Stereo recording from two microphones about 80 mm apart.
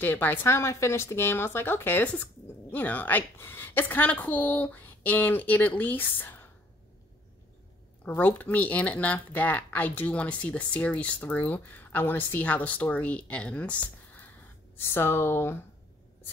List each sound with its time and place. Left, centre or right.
0.0 s speech: left
8.2 s speech: left
14.8 s speech: left